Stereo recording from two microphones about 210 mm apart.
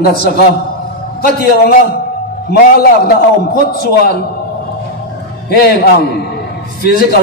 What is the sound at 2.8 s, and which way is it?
Speech, 45° left (ahead or behind).